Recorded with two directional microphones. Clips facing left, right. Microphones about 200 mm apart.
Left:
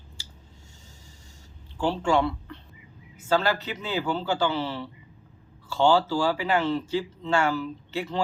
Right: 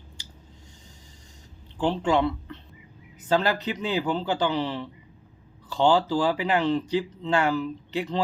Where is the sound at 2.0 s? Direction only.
20° right (ahead or behind).